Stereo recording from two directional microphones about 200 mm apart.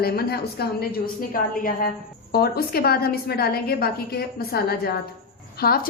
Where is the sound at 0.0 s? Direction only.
50° left (ahead or behind).